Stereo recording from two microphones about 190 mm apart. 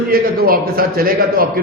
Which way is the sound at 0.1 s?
50° right (ahead or behind).